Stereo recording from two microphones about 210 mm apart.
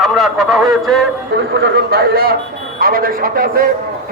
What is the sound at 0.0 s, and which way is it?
Speech, centre (ahead or behind).